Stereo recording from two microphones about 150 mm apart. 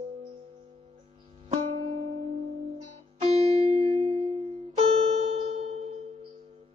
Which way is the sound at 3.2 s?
45° right (ahead or behind).